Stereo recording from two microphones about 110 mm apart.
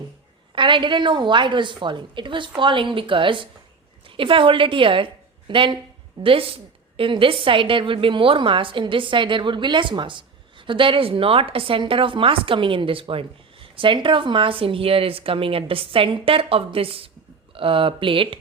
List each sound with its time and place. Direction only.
0.5 s a woman's voice: 50° right (ahead or behind)